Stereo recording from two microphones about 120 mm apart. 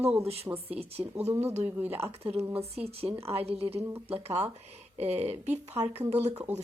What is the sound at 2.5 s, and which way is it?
Speech, 55° right (ahead or behind).